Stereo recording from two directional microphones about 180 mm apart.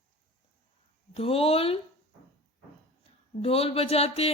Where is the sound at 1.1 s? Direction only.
30° left (ahead or behind).